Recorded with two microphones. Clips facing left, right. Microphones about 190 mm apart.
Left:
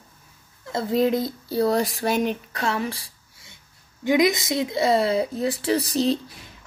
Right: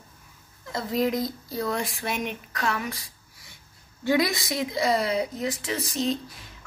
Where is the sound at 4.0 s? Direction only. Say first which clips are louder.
Left 4 dB; 15° left (ahead or behind); by 6.1 s 35° left (ahead or behind).